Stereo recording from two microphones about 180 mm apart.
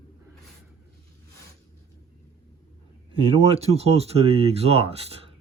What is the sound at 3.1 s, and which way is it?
Speech, 35° right (ahead or behind).